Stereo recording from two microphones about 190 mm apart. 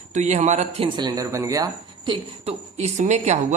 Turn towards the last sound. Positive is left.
turn(degrees=-35)  # may be behind; listen again after turning